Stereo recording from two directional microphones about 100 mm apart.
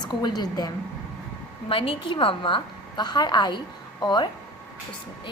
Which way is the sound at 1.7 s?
65° left (ahead or behind).